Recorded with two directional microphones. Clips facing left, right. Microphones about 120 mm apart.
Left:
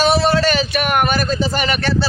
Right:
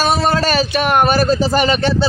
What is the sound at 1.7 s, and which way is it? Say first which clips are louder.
Speech: right 3 dB; 20° right (ahead or behind).